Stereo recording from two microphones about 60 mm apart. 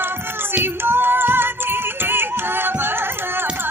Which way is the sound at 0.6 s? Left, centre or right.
Right.